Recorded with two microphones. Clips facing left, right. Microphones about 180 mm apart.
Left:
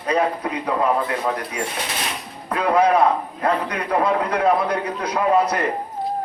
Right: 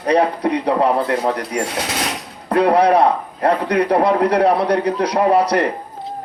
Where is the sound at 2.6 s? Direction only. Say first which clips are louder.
Right 3 dB; 35° right (ahead or behind).